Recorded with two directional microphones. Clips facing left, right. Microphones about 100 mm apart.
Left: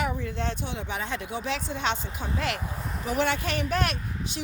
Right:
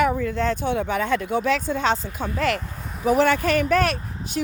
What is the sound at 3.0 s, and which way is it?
Speech, 45° right (ahead or behind).